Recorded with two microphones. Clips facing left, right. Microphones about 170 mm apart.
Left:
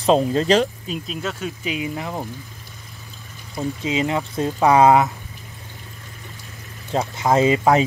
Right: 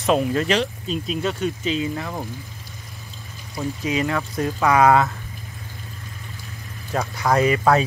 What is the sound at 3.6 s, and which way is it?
Speech, 20° left (ahead or behind).